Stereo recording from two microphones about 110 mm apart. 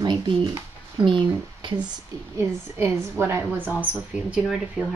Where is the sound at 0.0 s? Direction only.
40° right (ahead or behind).